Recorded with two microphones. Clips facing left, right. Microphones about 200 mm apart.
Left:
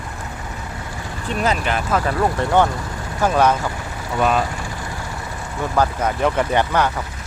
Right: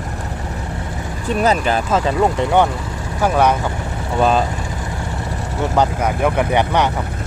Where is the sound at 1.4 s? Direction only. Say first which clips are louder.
Right 4 dB; 35° right (ahead or behind).